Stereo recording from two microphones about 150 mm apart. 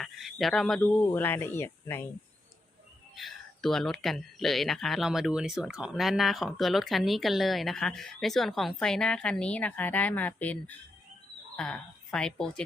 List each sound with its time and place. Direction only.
0.0 s speech: centre (ahead or behind)
1.0 s speech: 15° left (ahead or behind)
3.2 s speech: centre (ahead or behind)